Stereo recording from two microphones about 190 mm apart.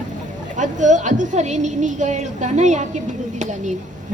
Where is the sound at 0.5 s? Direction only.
40° right (ahead or behind).